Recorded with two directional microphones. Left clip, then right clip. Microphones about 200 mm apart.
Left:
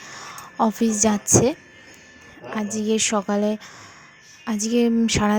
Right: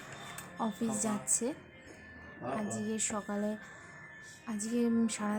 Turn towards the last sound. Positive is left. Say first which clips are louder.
# left 13 dB
turn(degrees=40)  # may be behind; listen again after turning